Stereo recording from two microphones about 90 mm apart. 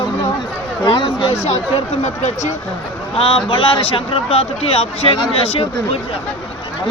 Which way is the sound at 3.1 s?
90° left.